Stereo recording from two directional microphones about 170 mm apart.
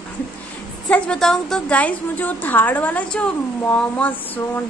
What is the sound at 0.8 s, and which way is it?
A woman's voice, 5° left (ahead or behind).